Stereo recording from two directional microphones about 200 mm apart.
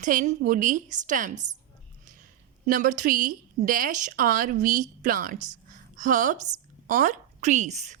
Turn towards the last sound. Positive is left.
turn(degrees=-35)  # may be behind; listen again after turning